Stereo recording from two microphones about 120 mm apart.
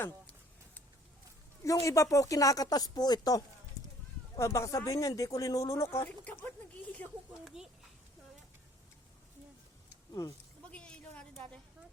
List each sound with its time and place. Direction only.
1.6 s speech: 25° left (ahead or behind)
6.1 s speech: 15° left (ahead or behind)
10.7 s a sound: 10° left (ahead or behind)